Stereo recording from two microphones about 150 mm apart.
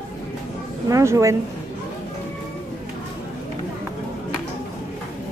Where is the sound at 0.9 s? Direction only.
20° right (ahead or behind).